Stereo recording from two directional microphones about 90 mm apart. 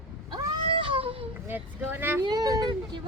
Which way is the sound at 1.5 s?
25° right (ahead or behind).